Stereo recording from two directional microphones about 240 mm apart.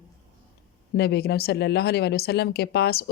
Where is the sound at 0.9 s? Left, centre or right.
Left.